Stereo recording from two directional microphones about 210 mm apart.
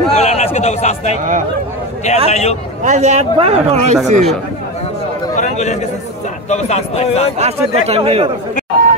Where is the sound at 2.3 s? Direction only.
30° left (ahead or behind).